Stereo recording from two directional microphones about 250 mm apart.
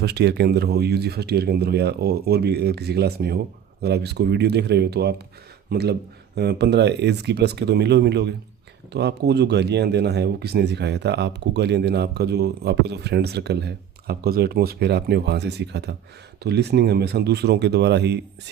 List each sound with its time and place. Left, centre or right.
0.0 s speech: right